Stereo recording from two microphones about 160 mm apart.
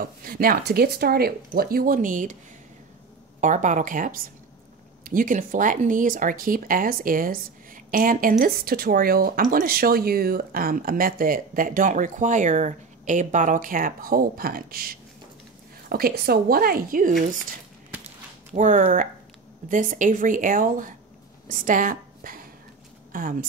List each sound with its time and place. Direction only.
0.0 s speech: 65° right (ahead or behind)
3.3 s speech: 50° right (ahead or behind)
18.5 s a woman's voice: 50° right (ahead or behind)